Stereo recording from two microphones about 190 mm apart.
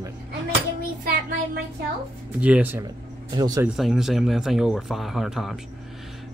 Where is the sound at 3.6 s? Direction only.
Centre (ahead or behind).